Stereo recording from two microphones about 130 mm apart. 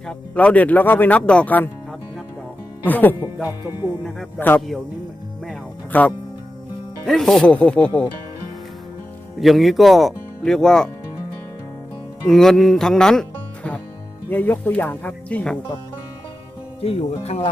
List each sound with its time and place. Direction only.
0.1 s speech: 10° left (ahead or behind)
2.8 s speech: 15° left (ahead or behind)
3.6 s speech: 20° right (ahead or behind)
4.4 s speech: 15° left (ahead or behind)
5.9 s speech: 10° left (ahead or behind)
9.4 s speech: centre (ahead or behind)
12.3 s speech: 5° left (ahead or behind)
14.3 s speech: 15° left (ahead or behind)
16.8 s speech: 50° left (ahead or behind)